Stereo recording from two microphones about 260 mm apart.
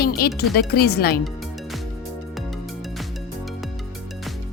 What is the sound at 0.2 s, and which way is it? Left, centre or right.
Speech, left.